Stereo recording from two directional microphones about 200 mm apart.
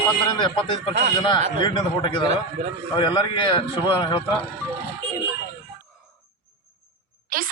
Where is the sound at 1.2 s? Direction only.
20° left (ahead or behind).